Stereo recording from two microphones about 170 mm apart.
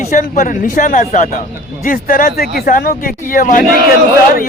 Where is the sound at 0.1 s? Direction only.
50° left (ahead or behind).